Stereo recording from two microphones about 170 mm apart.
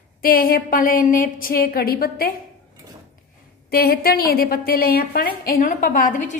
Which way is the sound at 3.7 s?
65° left (ahead or behind).